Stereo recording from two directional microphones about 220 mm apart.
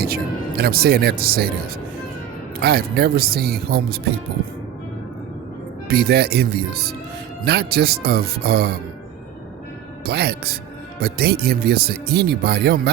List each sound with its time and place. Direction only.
0.0 s speech: 45° right (ahead or behind)
2.6 s speech: 45° right (ahead or behind)
5.9 s speech: 45° right (ahead or behind)
10.1 s speech: 45° right (ahead or behind)